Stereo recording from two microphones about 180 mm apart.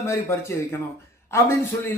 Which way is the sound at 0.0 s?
15° left (ahead or behind).